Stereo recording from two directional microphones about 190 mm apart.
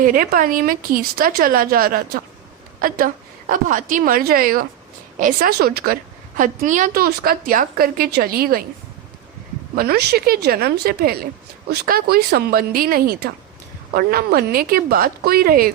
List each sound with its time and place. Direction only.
0.0 s a woman's voice: 45° right (ahead or behind)
3.5 s a woman's voice: 45° right (ahead or behind)
9.7 s a woman's voice: 55° right (ahead or behind)